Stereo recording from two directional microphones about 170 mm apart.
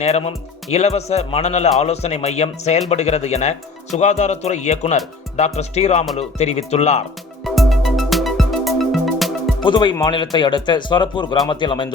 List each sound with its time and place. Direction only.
0.0 s speech: 35° left (ahead or behind)
7.4 s music: centre (ahead or behind)
9.6 s speech: 25° left (ahead or behind)